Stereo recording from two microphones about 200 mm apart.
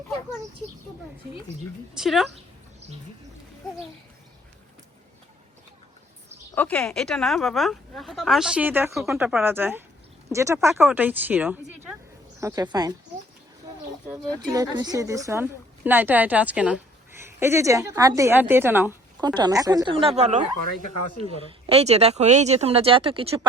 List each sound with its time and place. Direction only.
2.0 s speech: centre (ahead or behind)
6.5 s a woman's voice: 10° left (ahead or behind); by 12.9 s 20° right (ahead or behind)
14.5 s a woman's voice: 20° right (ahead or behind)